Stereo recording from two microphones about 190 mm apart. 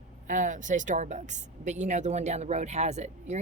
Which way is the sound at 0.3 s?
40° right (ahead or behind).